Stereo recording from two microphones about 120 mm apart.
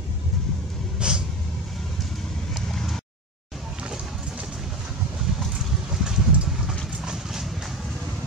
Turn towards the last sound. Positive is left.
turn(degrees=0)  # may be behind; listen again after turning